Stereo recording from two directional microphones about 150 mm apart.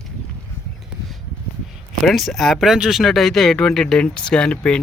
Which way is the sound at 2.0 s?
Centre (ahead or behind).